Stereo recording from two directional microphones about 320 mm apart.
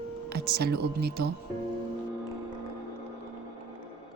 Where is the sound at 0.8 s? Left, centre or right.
Right.